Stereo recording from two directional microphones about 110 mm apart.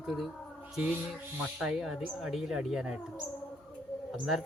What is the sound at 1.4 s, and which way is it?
Speech, 10° right (ahead or behind).